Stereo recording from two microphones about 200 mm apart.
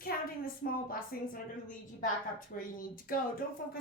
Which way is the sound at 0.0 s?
45° left (ahead or behind).